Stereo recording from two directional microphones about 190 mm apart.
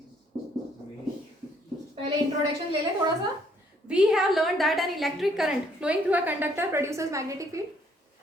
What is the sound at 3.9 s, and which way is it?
A woman's voice, 5° right (ahead or behind).